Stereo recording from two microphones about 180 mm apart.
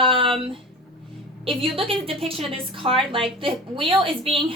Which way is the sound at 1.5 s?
30° right (ahead or behind).